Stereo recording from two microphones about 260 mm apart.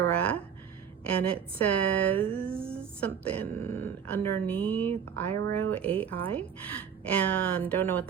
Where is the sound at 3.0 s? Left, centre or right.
Centre.